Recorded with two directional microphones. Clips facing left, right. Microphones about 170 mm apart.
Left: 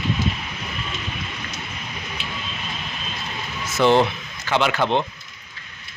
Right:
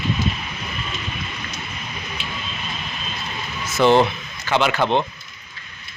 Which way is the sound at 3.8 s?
30° right (ahead or behind).